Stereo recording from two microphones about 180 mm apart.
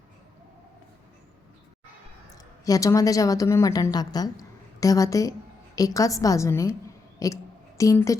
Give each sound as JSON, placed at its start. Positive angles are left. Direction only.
{"t": 2.3, "sound": "a woman's voice", "side_deg": 20}